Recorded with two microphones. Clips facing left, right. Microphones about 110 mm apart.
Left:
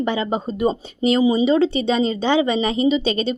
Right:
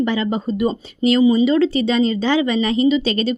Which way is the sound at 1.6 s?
15° left (ahead or behind).